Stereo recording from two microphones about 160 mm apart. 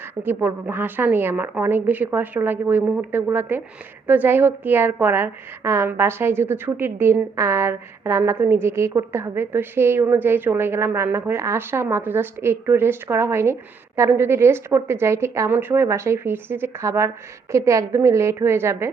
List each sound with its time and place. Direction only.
0.2 s a woman's voice: 10° right (ahead or behind)